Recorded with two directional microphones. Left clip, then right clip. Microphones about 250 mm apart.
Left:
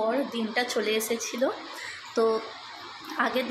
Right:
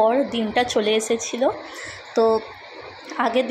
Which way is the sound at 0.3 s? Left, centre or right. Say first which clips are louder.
Right 7 dB; centre.